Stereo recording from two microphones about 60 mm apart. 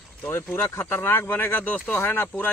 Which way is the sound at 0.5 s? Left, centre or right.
Left.